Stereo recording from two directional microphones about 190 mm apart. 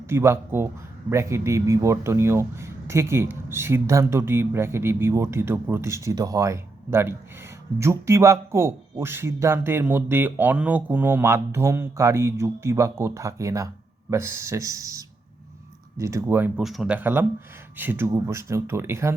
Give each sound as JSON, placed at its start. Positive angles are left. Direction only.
{"t": 0.1, "sound": "speech", "side_deg": -15}